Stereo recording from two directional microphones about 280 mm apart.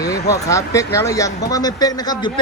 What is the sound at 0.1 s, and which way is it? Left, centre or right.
Speech, centre.